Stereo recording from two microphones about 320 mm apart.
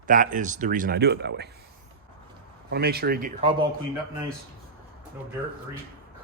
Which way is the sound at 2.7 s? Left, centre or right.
Right.